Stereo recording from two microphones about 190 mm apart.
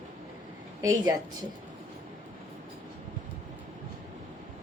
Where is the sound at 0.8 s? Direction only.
20° right (ahead or behind).